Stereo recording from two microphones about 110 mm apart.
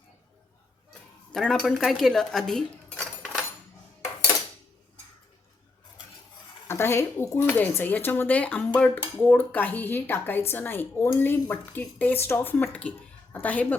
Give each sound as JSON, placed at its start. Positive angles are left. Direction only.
{"t": 1.3, "sound": "speech", "side_deg": 5}
{"t": 6.7, "sound": "speech", "side_deg": 20}